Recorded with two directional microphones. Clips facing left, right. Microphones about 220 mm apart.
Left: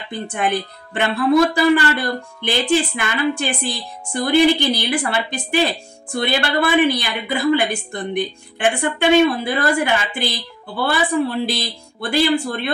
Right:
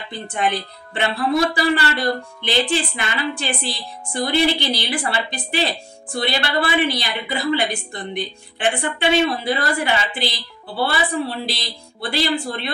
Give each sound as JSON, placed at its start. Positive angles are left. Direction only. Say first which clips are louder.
{"t": 0.1, "sound": "a woman's voice", "louder": "left 2 dB", "side_deg": 50}
{"t": 6.2, "sound": "a woman's voice", "louder": "left 3 dB", "side_deg": 50}